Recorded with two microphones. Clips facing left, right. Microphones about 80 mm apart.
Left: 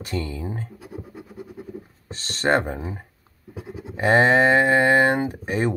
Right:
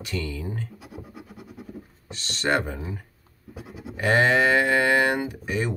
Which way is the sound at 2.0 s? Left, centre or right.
Left.